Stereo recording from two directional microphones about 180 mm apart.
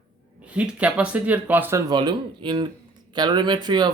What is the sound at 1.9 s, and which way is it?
Speech, 25° right (ahead or behind).